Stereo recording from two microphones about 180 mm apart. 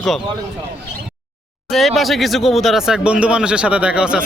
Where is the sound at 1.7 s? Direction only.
Centre (ahead or behind).